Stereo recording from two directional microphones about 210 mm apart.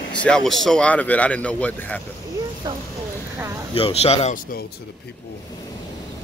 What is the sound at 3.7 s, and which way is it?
Speech, 30° left (ahead or behind).